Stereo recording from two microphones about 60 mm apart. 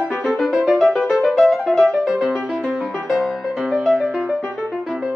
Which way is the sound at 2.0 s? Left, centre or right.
Centre.